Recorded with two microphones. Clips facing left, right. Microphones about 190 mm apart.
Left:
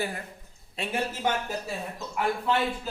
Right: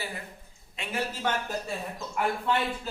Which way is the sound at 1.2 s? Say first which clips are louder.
Left 1 dB; 10° left (ahead or behind).